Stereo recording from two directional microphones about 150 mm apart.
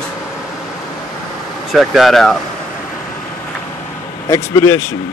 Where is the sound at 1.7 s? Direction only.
Centre (ahead or behind).